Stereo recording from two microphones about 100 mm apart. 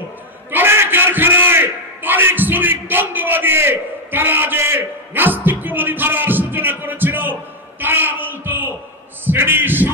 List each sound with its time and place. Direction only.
0.5 s a man's voice: 20° right (ahead or behind)
7.8 s a sound: 20° right (ahead or behind)
9.2 s a man's voice: 20° right (ahead or behind)